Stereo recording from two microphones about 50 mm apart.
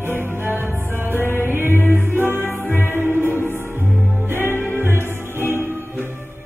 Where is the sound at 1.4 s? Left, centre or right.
Right.